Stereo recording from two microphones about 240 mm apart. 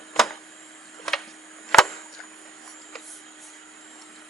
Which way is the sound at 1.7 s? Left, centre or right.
Centre.